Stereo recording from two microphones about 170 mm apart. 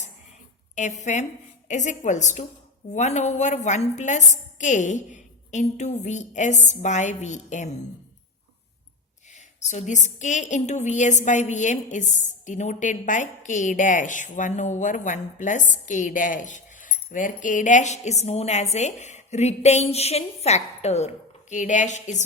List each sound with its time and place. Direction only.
0.8 s a woman's voice: 45° left (ahead or behind)
9.3 s a woman's voice: 45° left (ahead or behind)